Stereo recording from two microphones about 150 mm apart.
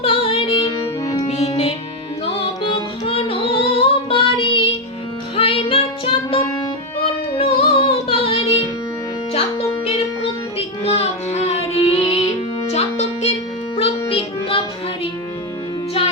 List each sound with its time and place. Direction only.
0.0 s music: 40° left (ahead or behind)
7.0 s music: 40° left (ahead or behind)
10.8 s music: 45° left (ahead or behind)